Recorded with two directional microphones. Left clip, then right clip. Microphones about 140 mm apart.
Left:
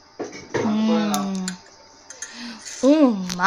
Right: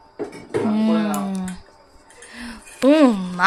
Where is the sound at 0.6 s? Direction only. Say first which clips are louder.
Right 1 dB; 5° right (ahead or behind).